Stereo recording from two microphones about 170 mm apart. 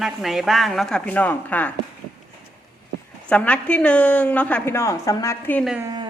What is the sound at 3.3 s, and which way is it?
A woman's voice, 5° left (ahead or behind).